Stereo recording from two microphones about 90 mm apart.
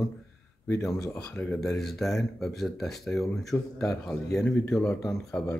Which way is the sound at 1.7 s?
5° left (ahead or behind).